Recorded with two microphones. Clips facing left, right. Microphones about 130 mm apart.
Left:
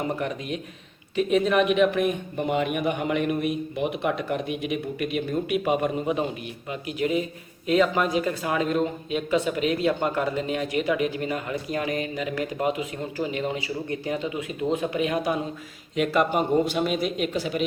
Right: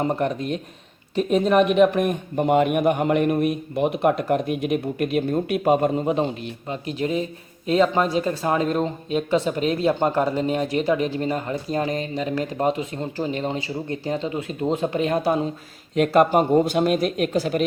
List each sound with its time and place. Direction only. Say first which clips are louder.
0.0 s speech: right 5 dB; 40° right (ahead or behind)